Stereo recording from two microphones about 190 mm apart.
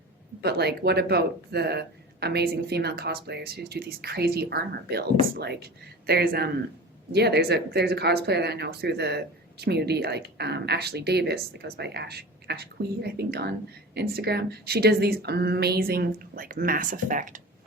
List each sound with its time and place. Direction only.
0.4 s a woman's voice: 60° right (ahead or behind); by 17.4 s 45° right (ahead or behind)